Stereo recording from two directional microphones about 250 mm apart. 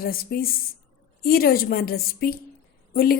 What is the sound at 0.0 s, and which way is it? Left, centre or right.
Speech, left.